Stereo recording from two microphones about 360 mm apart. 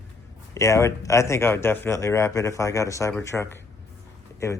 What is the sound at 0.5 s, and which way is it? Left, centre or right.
Speech, centre.